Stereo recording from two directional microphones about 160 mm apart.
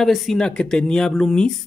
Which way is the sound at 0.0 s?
Centre (ahead or behind).